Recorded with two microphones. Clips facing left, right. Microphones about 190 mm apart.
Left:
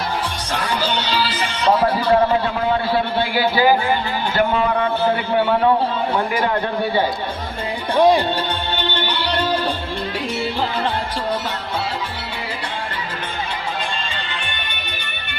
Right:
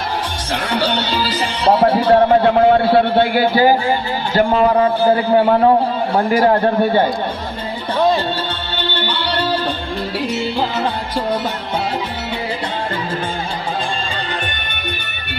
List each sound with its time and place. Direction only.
0.7 s a man's voice: 60° right (ahead or behind); by 2.0 s 25° right (ahead or behind)
2.4 s a man's voice: 60° right (ahead or behind)
7.9 s music: 15° left (ahead or behind)